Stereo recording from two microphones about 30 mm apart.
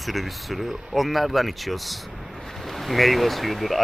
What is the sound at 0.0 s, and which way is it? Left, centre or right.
Speech, centre.